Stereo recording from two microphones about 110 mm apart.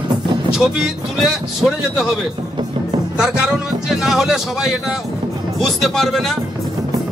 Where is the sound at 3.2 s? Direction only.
5° right (ahead or behind).